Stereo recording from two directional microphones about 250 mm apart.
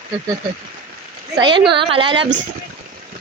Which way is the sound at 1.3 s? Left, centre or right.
Centre.